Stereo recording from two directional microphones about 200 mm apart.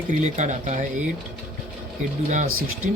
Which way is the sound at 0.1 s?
35° right (ahead or behind).